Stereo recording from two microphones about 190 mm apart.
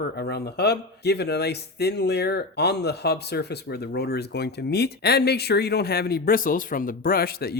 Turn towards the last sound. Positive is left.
turn(degrees=55)  # may be behind; listen again after turning